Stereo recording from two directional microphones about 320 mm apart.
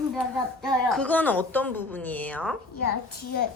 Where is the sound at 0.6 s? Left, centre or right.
Centre.